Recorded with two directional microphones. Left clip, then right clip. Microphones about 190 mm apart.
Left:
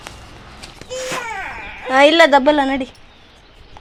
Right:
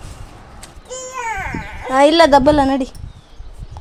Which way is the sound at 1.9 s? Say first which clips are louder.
Even; 15° right (ahead or behind).